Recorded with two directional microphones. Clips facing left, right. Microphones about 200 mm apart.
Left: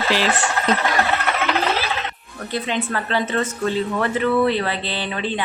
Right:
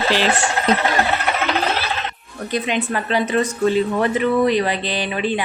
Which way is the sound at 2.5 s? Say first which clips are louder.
Right 2 dB; 15° right (ahead or behind).